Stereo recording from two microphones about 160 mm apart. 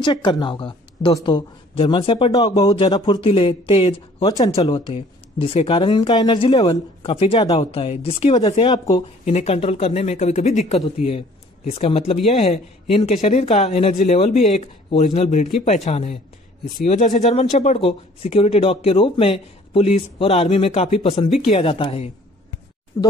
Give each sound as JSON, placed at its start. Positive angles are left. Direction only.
{"t": 0.0, "sound": "a man's voice", "side_deg": 30}
{"t": 9.2, "sound": "speech", "side_deg": 45}
{"t": 14.3, "sound": "speech", "side_deg": 55}
{"t": 14.9, "sound": "speech", "side_deg": 40}
{"t": 23.0, "sound": "speech", "side_deg": 15}